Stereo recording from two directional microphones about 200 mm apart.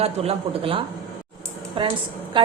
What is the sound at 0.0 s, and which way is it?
A man's voice, 30° right (ahead or behind).